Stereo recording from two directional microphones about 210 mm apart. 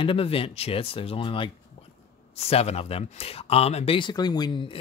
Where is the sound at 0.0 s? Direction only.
25° left (ahead or behind).